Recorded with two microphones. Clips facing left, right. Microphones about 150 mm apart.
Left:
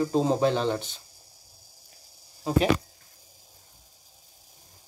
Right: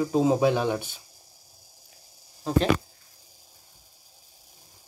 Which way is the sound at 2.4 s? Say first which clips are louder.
Even; 5° left (ahead or behind).